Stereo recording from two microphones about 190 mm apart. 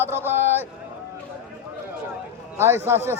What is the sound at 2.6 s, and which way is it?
Speech, 15° right (ahead or behind).